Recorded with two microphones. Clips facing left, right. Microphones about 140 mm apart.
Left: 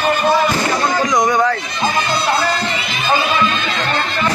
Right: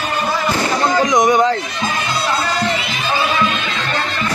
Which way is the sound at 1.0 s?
15° right (ahead or behind).